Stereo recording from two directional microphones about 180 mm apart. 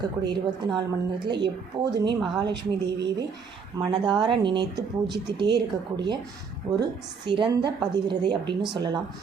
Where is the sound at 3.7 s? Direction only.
20° right (ahead or behind).